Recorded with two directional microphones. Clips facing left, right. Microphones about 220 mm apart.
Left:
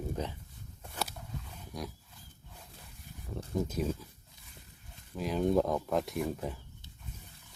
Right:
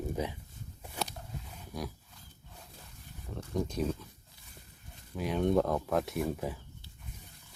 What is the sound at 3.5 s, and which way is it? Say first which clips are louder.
Speech: even; 5° left (ahead or behind).